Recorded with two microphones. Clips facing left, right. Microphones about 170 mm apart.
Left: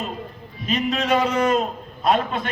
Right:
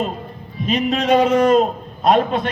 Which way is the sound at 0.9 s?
40° right (ahead or behind).